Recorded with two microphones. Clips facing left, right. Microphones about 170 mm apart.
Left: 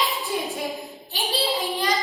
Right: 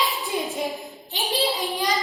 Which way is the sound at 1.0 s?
20° right (ahead or behind).